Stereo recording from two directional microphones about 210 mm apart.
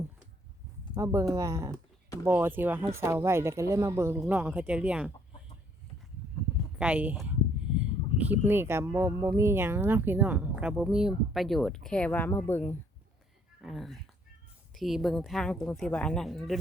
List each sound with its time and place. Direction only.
0.9 s a woman's voice: 15° right (ahead or behind)
6.7 s a sound: 5° right (ahead or behind)
8.3 s speech: 10° right (ahead or behind); by 12.7 s 10° left (ahead or behind)
13.6 s a woman's voice: centre (ahead or behind)